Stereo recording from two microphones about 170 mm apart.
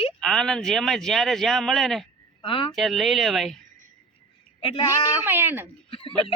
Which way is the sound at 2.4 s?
30° left (ahead or behind).